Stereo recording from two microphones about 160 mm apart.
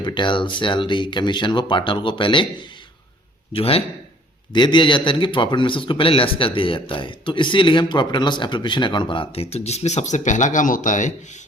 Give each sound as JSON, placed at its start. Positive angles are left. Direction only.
{"t": 0.0, "sound": "speech", "side_deg": 30}
{"t": 3.5, "sound": "speech", "side_deg": 35}